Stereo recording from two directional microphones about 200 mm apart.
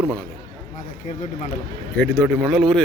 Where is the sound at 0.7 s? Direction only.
40° left (ahead or behind).